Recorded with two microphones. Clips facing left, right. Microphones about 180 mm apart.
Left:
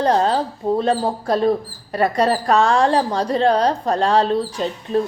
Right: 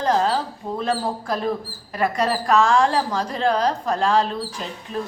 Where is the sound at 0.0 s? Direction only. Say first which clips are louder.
Left 3 dB; 35° left (ahead or behind).